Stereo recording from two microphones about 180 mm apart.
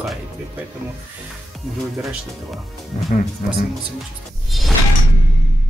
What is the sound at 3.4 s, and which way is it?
Speech, 40° left (ahead or behind).